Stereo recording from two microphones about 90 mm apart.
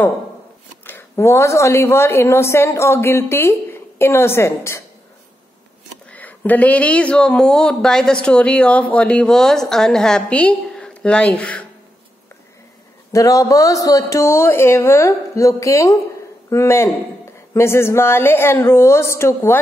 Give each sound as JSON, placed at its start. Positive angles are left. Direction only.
{"t": 0.8, "sound": "a woman's voice", "side_deg": 25}
{"t": 6.1, "sound": "speech", "side_deg": 20}
{"t": 13.1, "sound": "a woman's voice", "side_deg": 40}